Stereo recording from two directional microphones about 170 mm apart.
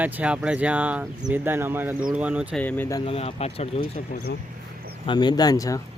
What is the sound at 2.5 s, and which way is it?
Speech, 10° left (ahead or behind).